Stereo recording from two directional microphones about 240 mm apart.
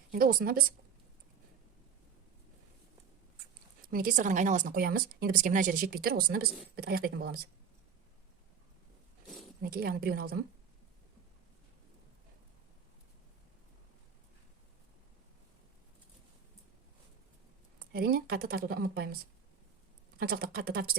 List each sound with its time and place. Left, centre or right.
0.1 s speech: right
3.8 s speech: right
9.6 s speech: right
17.7 s speech: right
20.1 s speech: right